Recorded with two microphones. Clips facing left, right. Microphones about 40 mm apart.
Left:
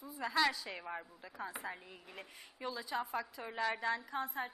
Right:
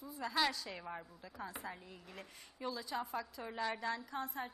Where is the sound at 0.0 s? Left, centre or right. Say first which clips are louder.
Left 2 dB; centre.